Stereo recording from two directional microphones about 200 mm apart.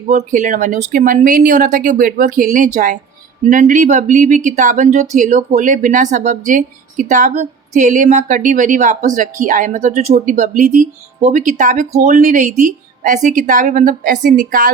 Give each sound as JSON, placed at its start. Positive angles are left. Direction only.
{"t": 0.1, "sound": "speech", "side_deg": -40}